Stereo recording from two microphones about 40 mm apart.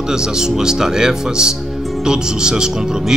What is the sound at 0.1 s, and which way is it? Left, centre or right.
Speech, centre.